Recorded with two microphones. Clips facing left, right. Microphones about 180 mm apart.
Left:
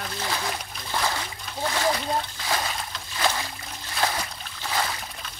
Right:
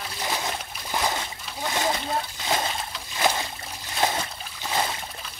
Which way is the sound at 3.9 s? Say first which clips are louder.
Right 2 dB; 25° right (ahead or behind).